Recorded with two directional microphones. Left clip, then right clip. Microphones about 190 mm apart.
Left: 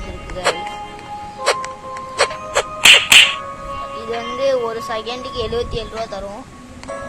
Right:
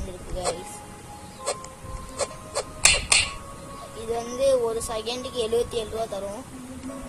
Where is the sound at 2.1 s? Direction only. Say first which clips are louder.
Left 12 dB; 45° left (ahead or behind).